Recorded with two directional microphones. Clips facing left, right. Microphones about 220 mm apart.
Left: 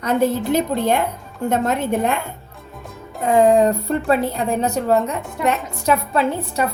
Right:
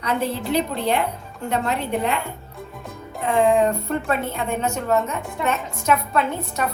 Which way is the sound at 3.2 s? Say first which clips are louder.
Left 4 dB; 40° left (ahead or behind).